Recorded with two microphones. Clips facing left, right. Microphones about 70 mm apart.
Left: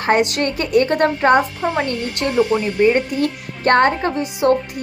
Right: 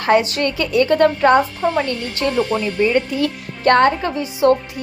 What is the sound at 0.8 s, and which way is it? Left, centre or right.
Speech, left.